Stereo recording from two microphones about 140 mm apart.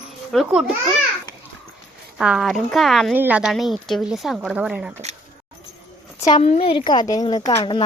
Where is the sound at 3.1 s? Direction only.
10° right (ahead or behind).